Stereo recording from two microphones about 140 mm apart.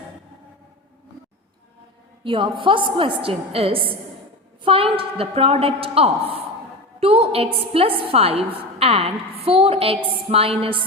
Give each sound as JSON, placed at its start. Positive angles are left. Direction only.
{"t": 2.2, "sound": "a woman's voice", "side_deg": -35}